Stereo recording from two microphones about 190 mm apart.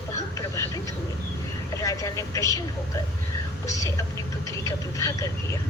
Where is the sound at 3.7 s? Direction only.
15° left (ahead or behind).